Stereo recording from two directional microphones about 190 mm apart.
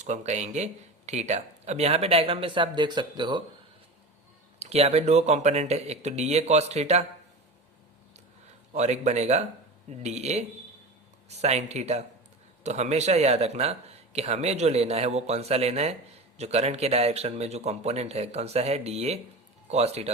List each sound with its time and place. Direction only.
0.0 s speech: 35° right (ahead or behind)
4.6 s speech: 35° right (ahead or behind)
8.7 s speech: 35° right (ahead or behind)